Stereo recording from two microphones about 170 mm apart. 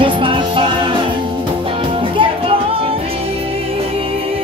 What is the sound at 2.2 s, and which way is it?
Music, 35° right (ahead or behind).